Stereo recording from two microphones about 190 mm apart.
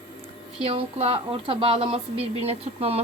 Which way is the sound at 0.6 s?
30° right (ahead or behind).